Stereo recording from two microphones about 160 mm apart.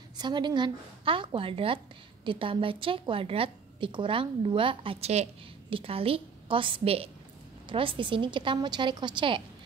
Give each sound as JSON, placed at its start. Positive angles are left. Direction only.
{"t": 0.2, "sound": "a woman's voice", "side_deg": -25}